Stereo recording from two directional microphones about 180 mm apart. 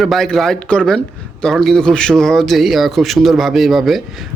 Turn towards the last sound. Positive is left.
turn(degrees=0)  # may be behind; listen again after turning